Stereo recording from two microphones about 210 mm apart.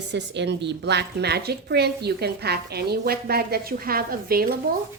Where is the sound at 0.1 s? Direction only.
55° right (ahead or behind).